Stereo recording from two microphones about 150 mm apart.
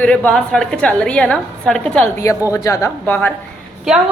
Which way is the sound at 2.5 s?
20° left (ahead or behind).